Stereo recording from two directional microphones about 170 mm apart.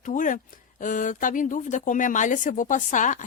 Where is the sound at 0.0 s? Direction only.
50° left (ahead or behind).